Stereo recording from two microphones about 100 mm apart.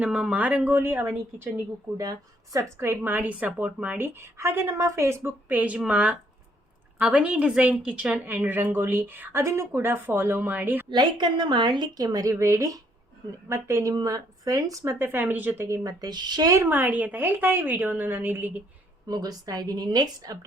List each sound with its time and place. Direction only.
0.0 s speech: 10° right (ahead or behind)
2.0 s speech: 35° right (ahead or behind); by 10.8 s 20° right (ahead or behind)
10.8 s a woman's voice: 50° right (ahead or behind); by 13.9 s 30° right (ahead or behind)
13.9 s a woman's voice: 40° right (ahead or behind)
14.9 s a woman's voice: 20° right (ahead or behind); by 16.6 s 40° right (ahead or behind)
16.6 s speech: 20° right (ahead or behind)
19.0 s a woman's voice: 40° right (ahead or behind)